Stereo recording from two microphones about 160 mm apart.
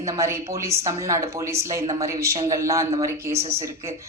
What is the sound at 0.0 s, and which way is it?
Speech, 20° right (ahead or behind).